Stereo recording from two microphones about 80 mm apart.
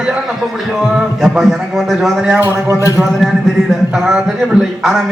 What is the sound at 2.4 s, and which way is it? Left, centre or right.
Speech, right.